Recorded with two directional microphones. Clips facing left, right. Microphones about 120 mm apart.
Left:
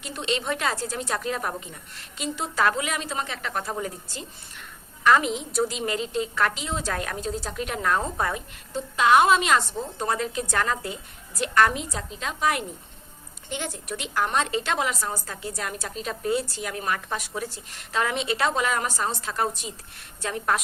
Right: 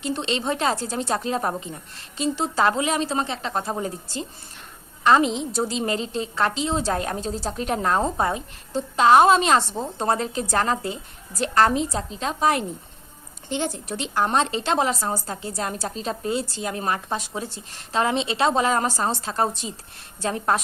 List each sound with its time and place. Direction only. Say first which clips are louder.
0.0 s a woman's voice: right 4 dB; 30° right (ahead or behind)